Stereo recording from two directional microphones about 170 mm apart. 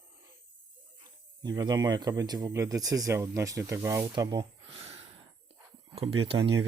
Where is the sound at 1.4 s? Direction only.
25° right (ahead or behind).